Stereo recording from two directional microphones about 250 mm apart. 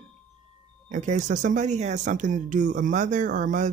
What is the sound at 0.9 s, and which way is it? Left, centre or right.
Speech, right.